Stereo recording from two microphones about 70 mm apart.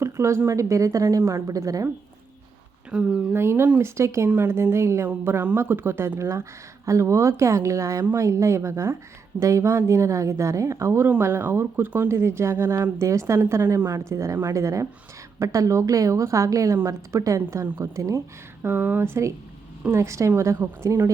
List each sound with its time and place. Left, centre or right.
0.0 s a woman's voice: right
2.9 s speech: centre
3.3 s a woman's voice: right
14.1 s a woman's voice: right
18.6 s a woman's voice: right